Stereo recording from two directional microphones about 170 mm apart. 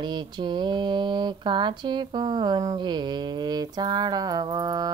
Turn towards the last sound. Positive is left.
turn(degrees=-20)  # may be behind; listen again after turning